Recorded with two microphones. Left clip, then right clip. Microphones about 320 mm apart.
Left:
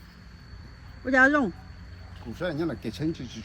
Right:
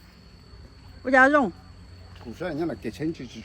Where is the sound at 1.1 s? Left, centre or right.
Centre.